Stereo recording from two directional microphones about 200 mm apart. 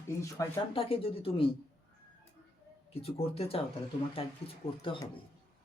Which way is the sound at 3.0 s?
30° left (ahead or behind).